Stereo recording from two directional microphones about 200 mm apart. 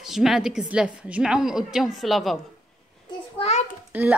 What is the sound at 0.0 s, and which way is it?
A woman's voice, centre (ahead or behind).